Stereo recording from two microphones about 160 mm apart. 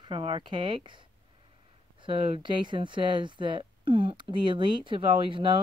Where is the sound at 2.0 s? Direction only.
30° right (ahead or behind).